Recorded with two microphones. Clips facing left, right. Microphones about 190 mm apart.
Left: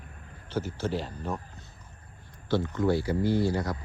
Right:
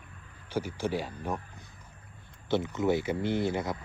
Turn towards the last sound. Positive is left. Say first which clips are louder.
# left 3 dB
turn(degrees=-20)  # may be behind; listen again after turning